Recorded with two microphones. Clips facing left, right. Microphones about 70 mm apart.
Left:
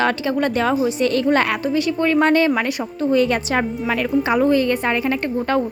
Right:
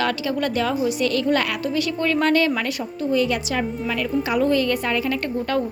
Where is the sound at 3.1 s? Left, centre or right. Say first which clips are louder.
Left 4 dB; left.